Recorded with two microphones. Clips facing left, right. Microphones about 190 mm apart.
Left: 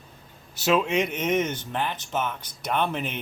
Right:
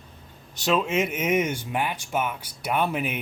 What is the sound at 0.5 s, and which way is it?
Speech, centre (ahead or behind).